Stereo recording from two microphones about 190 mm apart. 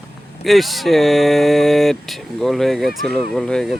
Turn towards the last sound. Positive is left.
turn(degrees=5)  # may be behind; listen again after turning